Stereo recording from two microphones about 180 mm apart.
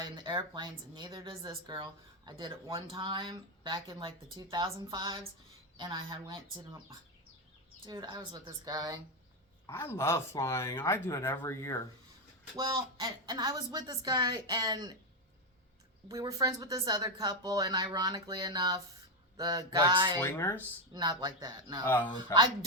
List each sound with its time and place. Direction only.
0.0 s speech: 25° right (ahead or behind)
7.9 s speech: 25° right (ahead or behind)
9.6 s speech: 15° left (ahead or behind)
12.5 s speech: 20° right (ahead or behind)
16.0 s speech: 20° right (ahead or behind)
20.2 s speech: 15° left (ahead or behind)
20.9 s speech: 25° right (ahead or behind)
21.8 s speech: 10° left (ahead or behind)